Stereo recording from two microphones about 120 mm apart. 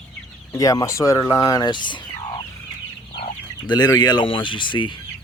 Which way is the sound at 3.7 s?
35° left (ahead or behind).